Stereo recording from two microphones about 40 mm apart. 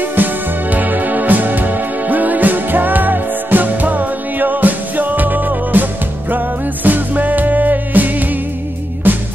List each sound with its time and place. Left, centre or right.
0.1 s music: right